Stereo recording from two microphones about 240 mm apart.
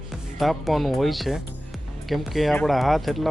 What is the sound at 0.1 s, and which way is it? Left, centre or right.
Speech, centre.